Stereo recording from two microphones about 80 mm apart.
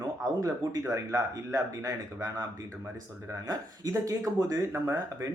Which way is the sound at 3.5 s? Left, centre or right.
Right.